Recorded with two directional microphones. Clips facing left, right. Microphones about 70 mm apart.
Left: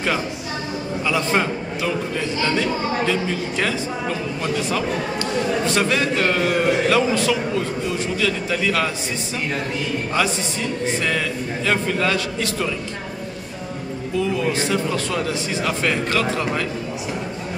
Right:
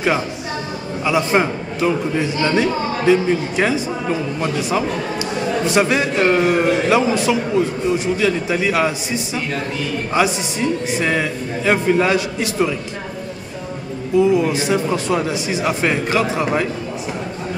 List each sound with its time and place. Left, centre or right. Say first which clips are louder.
1.0 s a man's voice: right 4 dB; centre
14.1 s speech: right 7 dB; centre